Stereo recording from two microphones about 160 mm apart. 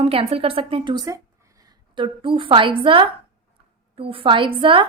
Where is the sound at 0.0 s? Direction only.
40° right (ahead or behind).